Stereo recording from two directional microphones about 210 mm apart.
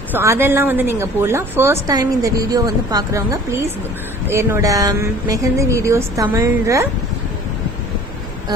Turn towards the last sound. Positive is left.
turn(degrees=-15)  # may be behind; listen again after turning